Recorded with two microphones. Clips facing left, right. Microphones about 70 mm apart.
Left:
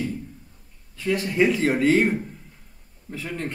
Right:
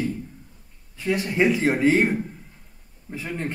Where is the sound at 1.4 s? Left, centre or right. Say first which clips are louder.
Right 1 dB; centre.